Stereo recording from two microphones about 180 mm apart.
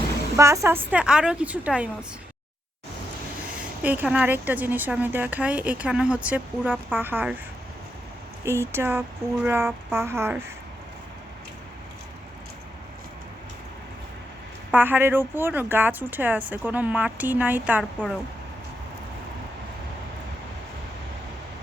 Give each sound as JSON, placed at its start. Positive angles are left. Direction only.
{"t": 0.3, "sound": "a woman's voice", "side_deg": -15}
{"t": 3.8, "sound": "a woman's voice", "side_deg": -10}
{"t": 8.4, "sound": "a woman's voice", "side_deg": -15}
{"t": 14.7, "sound": "a woman's voice", "side_deg": -10}